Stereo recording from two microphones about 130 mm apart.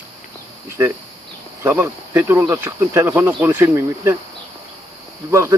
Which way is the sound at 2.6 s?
20° right (ahead or behind).